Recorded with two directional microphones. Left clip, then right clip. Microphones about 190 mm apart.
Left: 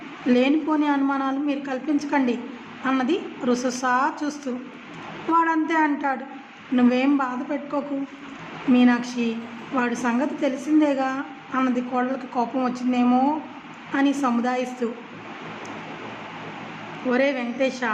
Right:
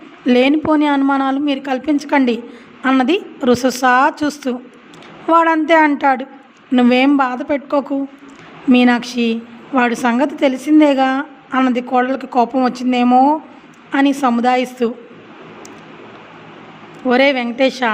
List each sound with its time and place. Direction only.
0.3 s a woman's voice: 45° right (ahead or behind)
17.1 s a woman's voice: 50° right (ahead or behind)